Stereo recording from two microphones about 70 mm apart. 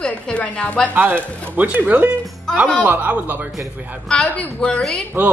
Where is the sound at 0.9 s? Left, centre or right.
Right.